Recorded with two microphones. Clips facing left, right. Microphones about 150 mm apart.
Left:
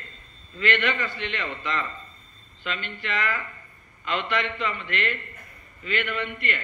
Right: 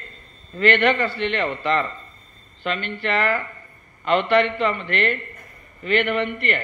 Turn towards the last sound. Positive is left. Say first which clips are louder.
# right 7 dB
turn(degrees=-60)  # may be behind; listen again after turning